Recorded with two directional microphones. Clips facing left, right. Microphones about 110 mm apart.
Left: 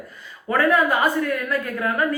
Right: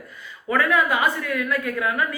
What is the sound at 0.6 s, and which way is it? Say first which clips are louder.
A woman's voice: left 3 dB; 40° left (ahead or behind).